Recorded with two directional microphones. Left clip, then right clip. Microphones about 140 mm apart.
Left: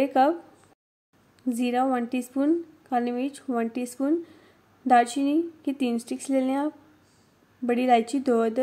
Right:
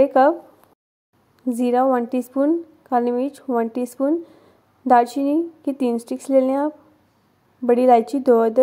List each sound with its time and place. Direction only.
0.0 s a woman's voice: 20° right (ahead or behind)
1.5 s a woman's voice: 20° right (ahead or behind)